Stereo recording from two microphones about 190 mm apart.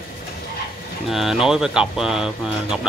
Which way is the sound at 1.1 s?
Centre (ahead or behind).